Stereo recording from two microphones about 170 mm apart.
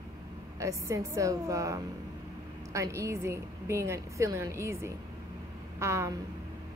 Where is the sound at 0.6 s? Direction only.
20° right (ahead or behind).